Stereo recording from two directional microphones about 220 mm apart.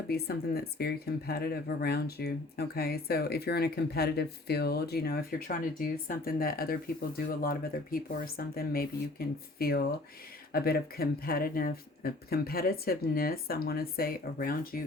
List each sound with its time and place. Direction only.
0.1 s speech: 45° left (ahead or behind)